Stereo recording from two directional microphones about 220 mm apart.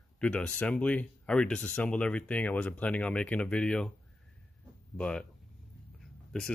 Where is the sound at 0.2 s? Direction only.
5° left (ahead or behind).